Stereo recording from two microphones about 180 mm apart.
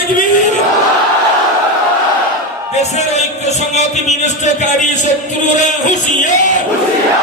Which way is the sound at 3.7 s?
40° left (ahead or behind).